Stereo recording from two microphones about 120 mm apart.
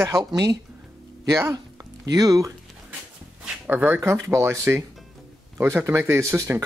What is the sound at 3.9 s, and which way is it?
Speech, 25° right (ahead or behind).